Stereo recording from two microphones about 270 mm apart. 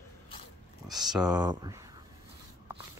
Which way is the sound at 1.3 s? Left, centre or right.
Centre.